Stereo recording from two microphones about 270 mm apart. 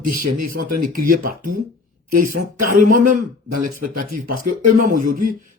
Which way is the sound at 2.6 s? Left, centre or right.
Right.